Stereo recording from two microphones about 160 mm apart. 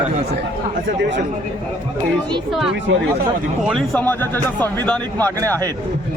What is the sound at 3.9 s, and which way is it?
Speech, 10° left (ahead or behind).